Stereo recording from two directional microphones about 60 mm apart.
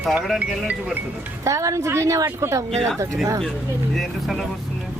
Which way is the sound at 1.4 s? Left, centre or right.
Right.